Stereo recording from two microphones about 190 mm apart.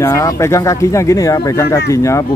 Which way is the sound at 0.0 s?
15° left (ahead or behind).